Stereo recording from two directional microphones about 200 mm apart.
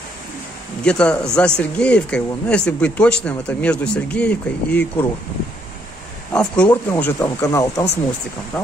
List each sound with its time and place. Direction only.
0.8 s speech: 5° left (ahead or behind)
6.3 s speech: 5° left (ahead or behind)
8.5 s speech: centre (ahead or behind)